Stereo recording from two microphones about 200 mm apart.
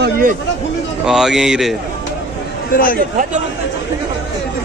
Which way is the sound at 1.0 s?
Centre (ahead or behind).